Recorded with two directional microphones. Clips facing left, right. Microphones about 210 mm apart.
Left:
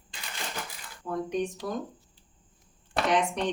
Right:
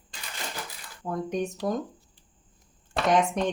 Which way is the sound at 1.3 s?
45° right (ahead or behind).